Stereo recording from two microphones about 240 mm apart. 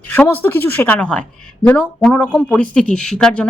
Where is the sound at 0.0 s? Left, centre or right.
Centre.